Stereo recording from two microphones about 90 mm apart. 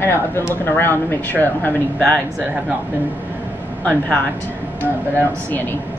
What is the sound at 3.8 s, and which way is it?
Speech, 15° left (ahead or behind).